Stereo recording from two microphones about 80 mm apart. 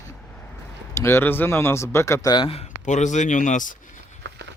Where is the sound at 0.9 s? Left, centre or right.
Left.